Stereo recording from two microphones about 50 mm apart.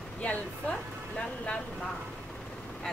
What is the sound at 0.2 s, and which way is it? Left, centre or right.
Speech, left.